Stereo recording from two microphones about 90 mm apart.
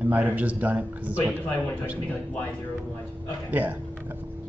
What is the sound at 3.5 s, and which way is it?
Speech, 20° right (ahead or behind).